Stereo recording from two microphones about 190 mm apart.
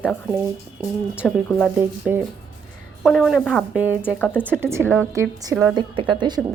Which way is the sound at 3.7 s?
10° right (ahead or behind).